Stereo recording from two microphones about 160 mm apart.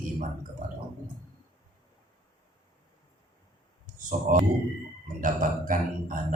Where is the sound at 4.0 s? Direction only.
55° right (ahead or behind).